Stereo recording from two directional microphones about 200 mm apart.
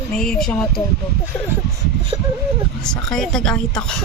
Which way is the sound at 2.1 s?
20° right (ahead or behind).